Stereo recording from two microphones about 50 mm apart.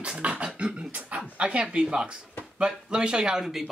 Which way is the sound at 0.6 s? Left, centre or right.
Right.